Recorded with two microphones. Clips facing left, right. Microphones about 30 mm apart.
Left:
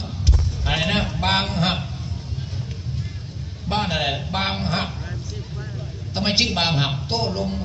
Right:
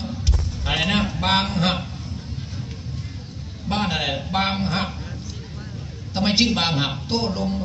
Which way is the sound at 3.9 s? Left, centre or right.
Centre.